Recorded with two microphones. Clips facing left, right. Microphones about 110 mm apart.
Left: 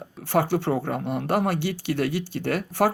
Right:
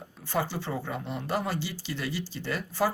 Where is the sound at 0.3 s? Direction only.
60° left (ahead or behind).